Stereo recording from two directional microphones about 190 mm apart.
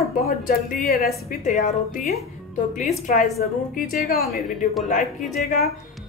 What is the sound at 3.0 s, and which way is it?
Speech, 50° left (ahead or behind).